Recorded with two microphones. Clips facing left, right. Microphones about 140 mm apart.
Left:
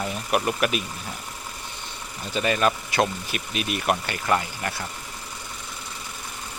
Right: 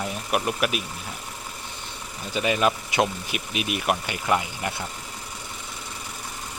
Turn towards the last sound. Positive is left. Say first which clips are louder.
# even
turn(degrees=-10)  # may be behind; listen again after turning